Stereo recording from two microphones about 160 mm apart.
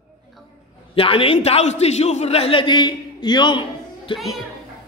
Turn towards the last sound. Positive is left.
turn(degrees=30)  # may be behind; listen again after turning